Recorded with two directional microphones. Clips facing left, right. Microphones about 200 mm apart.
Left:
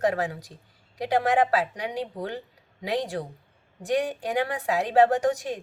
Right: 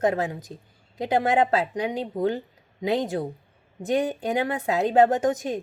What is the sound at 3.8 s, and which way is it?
Speech, 20° right (ahead or behind).